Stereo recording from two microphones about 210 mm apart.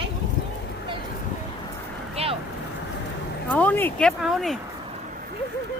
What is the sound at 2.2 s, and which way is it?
Speech, 30° right (ahead or behind).